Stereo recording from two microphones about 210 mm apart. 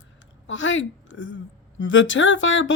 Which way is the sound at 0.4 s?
65° left (ahead or behind).